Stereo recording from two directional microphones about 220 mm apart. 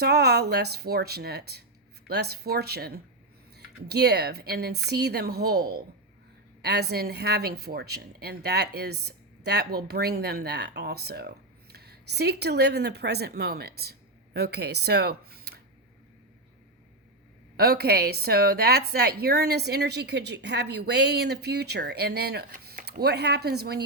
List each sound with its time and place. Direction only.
0.0 s a woman's voice: 45° right (ahead or behind)
17.6 s a woman's voice: 45° right (ahead or behind)